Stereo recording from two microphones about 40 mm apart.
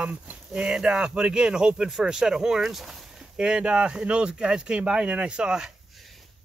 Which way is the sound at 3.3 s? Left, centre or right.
Centre.